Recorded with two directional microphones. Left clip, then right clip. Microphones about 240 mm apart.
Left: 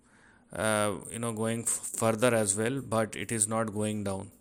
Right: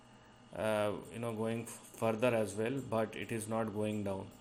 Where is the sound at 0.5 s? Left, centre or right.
Left.